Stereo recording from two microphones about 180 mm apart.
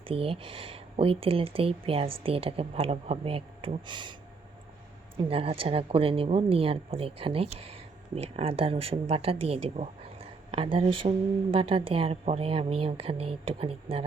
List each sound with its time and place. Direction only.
0.1 s speech: 30° right (ahead or behind)
5.1 s speech: 30° right (ahead or behind)